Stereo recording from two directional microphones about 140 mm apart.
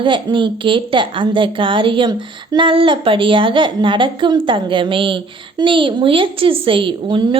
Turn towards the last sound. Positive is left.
turn(degrees=-35)  # may be behind; listen again after turning